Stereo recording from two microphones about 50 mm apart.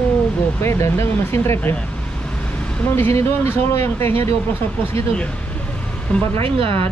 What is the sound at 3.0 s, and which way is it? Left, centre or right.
Speech, left.